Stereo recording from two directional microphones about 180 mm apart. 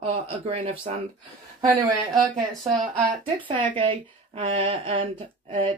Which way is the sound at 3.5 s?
30° right (ahead or behind).